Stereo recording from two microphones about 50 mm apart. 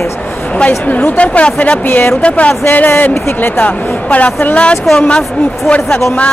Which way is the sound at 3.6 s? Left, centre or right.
Left.